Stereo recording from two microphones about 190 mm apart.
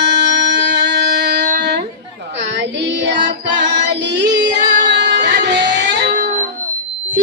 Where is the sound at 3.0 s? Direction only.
65° right (ahead or behind).